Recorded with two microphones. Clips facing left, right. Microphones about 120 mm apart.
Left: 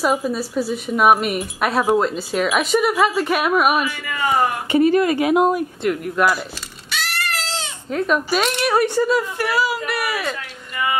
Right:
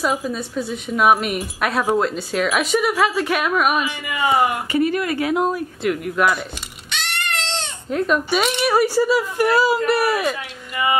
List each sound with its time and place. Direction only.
0.0 s speech: 5° left (ahead or behind)
3.8 s speech: 15° right (ahead or behind)
4.6 s speech: 30° left (ahead or behind)
5.8 s speech: centre (ahead or behind)
6.9 s bleat: 5° left (ahead or behind)
9.4 s speech: 25° right (ahead or behind)